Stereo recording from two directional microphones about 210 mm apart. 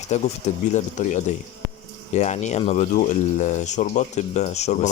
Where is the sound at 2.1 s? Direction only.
35° left (ahead or behind).